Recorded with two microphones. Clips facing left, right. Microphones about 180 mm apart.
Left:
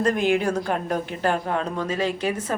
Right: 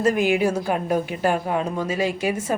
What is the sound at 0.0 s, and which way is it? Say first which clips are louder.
A woman's voice: right 2 dB; 10° right (ahead or behind).